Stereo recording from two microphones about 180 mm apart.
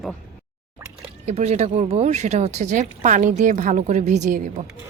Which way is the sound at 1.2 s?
40° right (ahead or behind).